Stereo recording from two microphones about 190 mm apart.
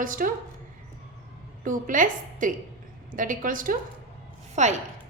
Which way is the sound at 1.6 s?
45° right (ahead or behind).